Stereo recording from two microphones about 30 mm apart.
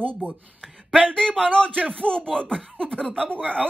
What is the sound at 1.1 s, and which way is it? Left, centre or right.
Speech, left.